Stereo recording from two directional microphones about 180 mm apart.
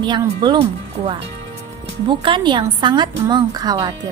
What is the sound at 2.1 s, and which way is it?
A woman's voice, 25° right (ahead or behind).